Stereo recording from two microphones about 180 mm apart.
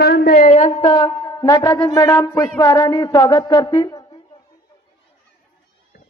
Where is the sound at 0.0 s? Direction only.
65° left (ahead or behind).